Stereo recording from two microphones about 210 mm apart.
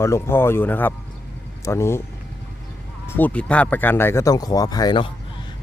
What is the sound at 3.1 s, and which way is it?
Speech, 10° left (ahead or behind).